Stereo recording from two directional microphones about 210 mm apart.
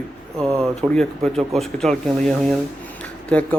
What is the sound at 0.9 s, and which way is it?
Speech, centre (ahead or behind).